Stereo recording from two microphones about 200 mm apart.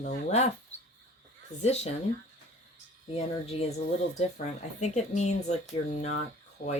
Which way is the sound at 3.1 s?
30° left (ahead or behind).